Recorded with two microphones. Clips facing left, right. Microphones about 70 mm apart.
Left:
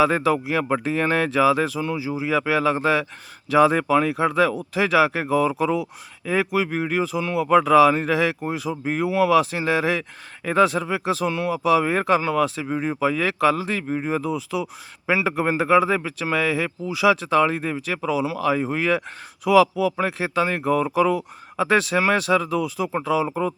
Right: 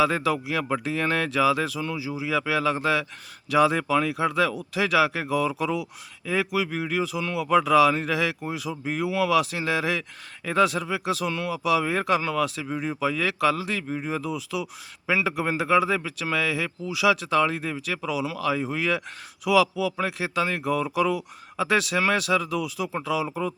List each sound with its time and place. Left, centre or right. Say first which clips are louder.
0.0 s speech: left 4 dB; left